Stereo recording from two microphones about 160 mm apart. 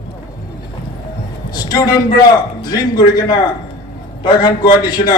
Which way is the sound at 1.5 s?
25° left (ahead or behind).